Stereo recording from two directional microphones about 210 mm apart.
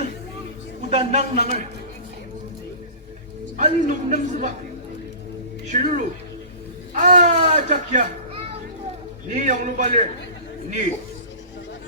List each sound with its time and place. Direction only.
0.8 s a man's voice: 30° right (ahead or behind)
3.6 s a man's voice: 35° right (ahead or behind)
5.6 s a man's voice: 35° right (ahead or behind)